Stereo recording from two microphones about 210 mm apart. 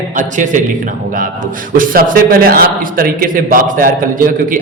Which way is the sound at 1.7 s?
40° right (ahead or behind).